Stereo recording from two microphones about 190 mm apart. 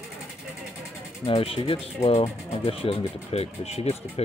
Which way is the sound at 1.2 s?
30° left (ahead or behind).